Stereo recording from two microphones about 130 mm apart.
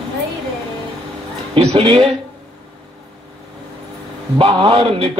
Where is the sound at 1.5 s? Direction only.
50° right (ahead or behind).